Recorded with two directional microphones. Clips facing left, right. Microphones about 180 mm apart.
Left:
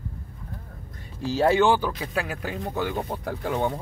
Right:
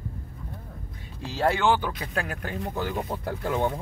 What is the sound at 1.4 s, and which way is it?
Speech, 15° left (ahead or behind).